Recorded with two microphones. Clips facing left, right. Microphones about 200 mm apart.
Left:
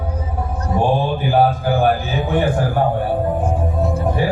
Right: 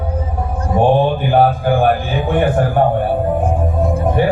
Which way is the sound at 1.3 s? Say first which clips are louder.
Right 2 dB; 60° right (ahead or behind).